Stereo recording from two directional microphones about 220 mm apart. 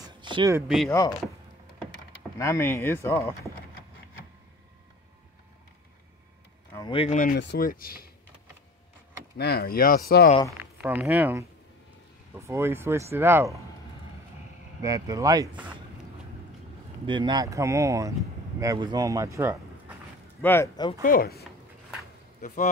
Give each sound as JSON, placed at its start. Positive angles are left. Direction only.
{"t": 0.0, "sound": "a sound", "side_deg": -20}
{"t": 0.8, "sound": "speech", "side_deg": 15}
{"t": 2.3, "sound": "speech", "side_deg": 10}
{"t": 6.7, "sound": "speech", "side_deg": 20}
{"t": 7.3, "sound": "speech", "side_deg": 40}
{"t": 9.4, "sound": "speech", "side_deg": 45}
{"t": 10.8, "sound": "speech", "side_deg": -10}
{"t": 14.8, "sound": "speech", "side_deg": -15}
{"t": 17.0, "sound": "speech", "side_deg": -20}
{"t": 20.4, "sound": "speech", "side_deg": 10}
{"t": 21.0, "sound": "speech", "side_deg": 40}